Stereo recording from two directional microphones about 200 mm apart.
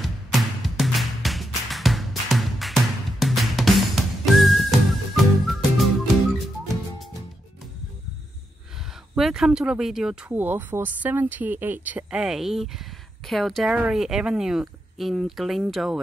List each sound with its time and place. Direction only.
0.0 s music: centre (ahead or behind)
9.1 s speech: centre (ahead or behind)